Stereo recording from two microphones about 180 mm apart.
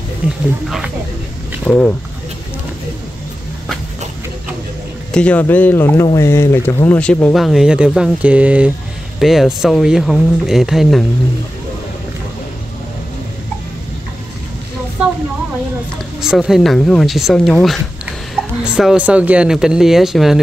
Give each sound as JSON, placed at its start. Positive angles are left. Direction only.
{"t": 0.7, "sound": "speech", "side_deg": -5}
{"t": 5.1, "sound": "speech", "side_deg": 5}
{"t": 16.2, "sound": "speech", "side_deg": -5}